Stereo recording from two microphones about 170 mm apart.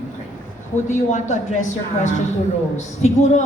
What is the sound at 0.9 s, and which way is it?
A woman's voice, 45° left (ahead or behind).